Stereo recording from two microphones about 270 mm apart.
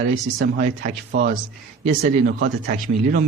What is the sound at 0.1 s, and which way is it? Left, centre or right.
Speech, right.